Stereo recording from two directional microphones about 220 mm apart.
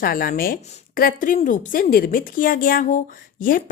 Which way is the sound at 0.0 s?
40° left (ahead or behind).